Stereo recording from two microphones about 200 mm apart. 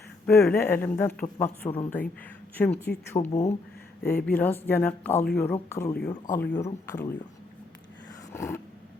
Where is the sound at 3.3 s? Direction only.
35° left (ahead or behind).